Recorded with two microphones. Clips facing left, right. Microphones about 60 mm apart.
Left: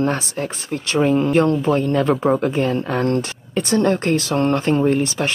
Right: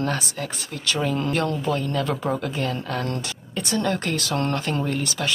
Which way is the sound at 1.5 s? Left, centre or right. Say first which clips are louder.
Left 7 dB; left.